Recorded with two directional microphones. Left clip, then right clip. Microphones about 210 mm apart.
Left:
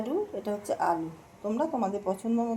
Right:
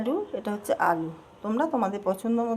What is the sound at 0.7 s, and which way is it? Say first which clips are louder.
Speech: right 4 dB; 30° right (ahead or behind).